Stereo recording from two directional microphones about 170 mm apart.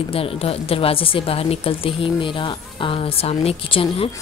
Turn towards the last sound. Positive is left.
turn(degrees=35)  # may be behind; listen again after turning